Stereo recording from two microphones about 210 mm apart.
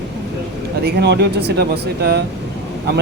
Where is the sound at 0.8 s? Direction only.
50° right (ahead or behind).